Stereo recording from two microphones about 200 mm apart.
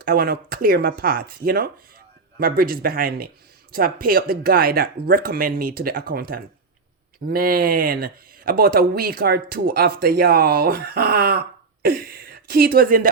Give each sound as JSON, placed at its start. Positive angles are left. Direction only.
{"t": 0.0, "sound": "speech", "side_deg": -50}